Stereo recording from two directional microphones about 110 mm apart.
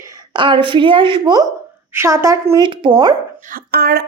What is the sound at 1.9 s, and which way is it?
Speech, 25° right (ahead or behind).